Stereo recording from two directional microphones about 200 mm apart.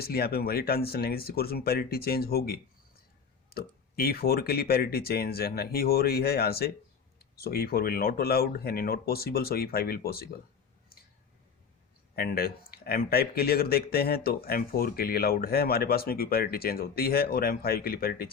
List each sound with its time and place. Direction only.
0.0 s speech: 50° left (ahead or behind)
12.1 s speech: 50° left (ahead or behind)